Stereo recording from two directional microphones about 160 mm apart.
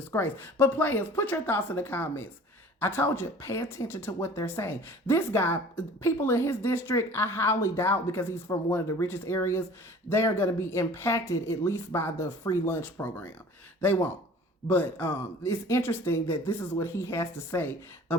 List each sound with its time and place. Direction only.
0.1 s speech: 15° left (ahead or behind)